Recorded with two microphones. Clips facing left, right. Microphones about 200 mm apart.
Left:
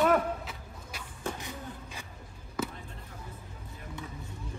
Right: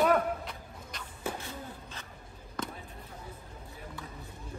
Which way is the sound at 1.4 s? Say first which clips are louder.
Left 1 dB; 15° left (ahead or behind).